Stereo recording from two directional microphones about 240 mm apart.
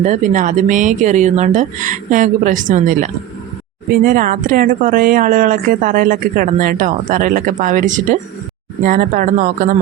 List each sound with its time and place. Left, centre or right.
0.0 s speech: right